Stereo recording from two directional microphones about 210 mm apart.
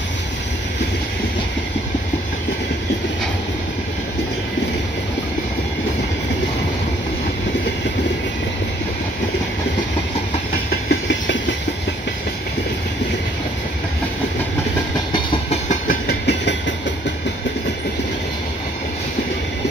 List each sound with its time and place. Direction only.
10.7 s train: 55° left (ahead or behind)
15.1 s train: 35° left (ahead or behind); by 16.5 s 50° left (ahead or behind)